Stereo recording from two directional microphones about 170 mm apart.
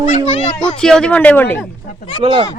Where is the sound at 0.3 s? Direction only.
35° left (ahead or behind).